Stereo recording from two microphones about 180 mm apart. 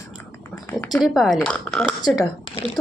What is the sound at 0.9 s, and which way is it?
A woman's voice, centre (ahead or behind).